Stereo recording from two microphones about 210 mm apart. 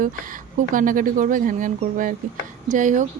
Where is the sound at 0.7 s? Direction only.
40° right (ahead or behind).